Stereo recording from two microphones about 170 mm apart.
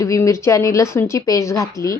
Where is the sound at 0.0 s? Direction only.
20° left (ahead or behind).